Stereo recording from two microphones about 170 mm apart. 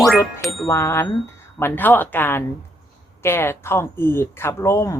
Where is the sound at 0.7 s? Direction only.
15° left (ahead or behind).